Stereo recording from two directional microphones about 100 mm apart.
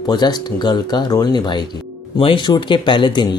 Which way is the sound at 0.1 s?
45° left (ahead or behind).